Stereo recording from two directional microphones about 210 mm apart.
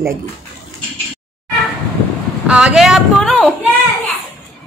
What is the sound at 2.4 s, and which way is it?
Speech, 5° right (ahead or behind).